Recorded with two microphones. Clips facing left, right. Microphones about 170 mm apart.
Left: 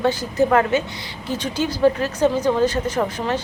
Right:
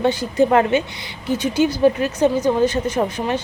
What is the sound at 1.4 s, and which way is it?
Speech, 10° right (ahead or behind).